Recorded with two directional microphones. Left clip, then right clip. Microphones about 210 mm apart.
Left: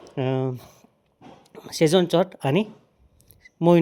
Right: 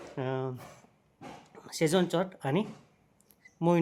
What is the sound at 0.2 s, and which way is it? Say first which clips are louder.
Speech: left 8 dB; 35° left (ahead or behind).